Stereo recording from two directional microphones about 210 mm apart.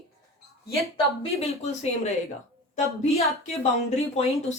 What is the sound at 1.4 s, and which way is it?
A woman's voice, 30° left (ahead or behind).